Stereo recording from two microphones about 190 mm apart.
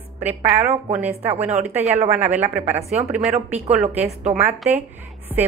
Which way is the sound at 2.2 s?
10° right (ahead or behind).